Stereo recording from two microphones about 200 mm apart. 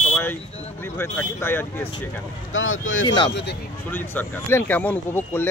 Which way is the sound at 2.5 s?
75° left (ahead or behind).